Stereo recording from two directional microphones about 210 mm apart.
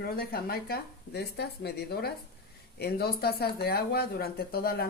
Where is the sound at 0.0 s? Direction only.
45° left (ahead or behind).